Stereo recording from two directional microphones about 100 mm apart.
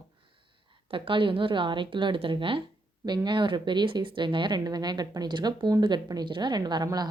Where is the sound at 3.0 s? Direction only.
45° right (ahead or behind).